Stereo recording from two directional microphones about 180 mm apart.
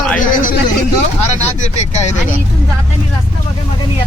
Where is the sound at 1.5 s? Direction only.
40° left (ahead or behind).